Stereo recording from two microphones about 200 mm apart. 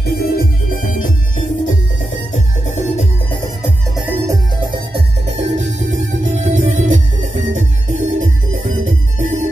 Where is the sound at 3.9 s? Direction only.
10° right (ahead or behind).